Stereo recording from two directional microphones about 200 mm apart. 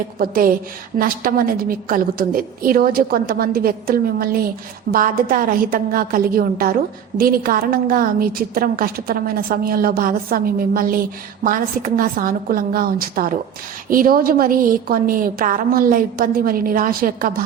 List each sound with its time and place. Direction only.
0.2 s a woman's voice: 45° right (ahead or behind)